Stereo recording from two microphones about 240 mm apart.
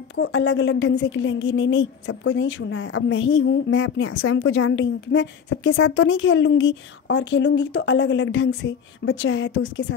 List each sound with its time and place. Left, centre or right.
0.1 s a woman's voice: left